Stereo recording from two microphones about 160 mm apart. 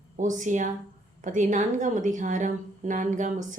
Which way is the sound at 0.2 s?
50° right (ahead or behind).